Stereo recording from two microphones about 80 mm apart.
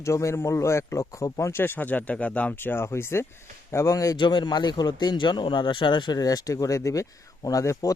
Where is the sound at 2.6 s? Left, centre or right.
Left.